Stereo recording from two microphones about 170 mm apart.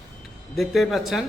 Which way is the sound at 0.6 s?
Centre (ahead or behind).